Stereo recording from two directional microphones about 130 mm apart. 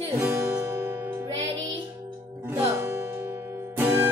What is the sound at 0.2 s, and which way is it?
Music, 5° right (ahead or behind).